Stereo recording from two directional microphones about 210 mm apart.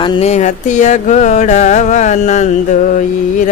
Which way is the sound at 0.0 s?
25° left (ahead or behind).